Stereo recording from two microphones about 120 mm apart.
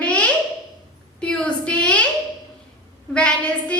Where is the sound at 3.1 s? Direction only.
10° left (ahead or behind).